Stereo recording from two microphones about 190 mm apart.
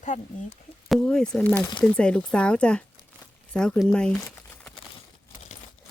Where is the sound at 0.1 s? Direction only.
40° left (ahead or behind).